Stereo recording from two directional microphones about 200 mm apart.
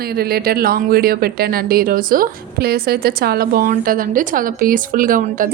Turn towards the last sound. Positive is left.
turn(degrees=-45)  # may be behind; listen again after turning